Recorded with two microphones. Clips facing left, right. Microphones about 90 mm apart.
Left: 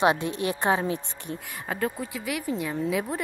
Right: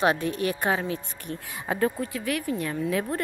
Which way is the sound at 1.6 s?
5° right (ahead or behind).